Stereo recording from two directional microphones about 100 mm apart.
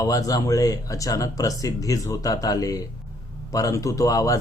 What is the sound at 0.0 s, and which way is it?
Speech, 35° left (ahead or behind).